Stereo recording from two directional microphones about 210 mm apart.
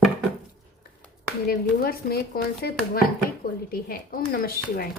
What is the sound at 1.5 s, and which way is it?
Speech, 45° left (ahead or behind).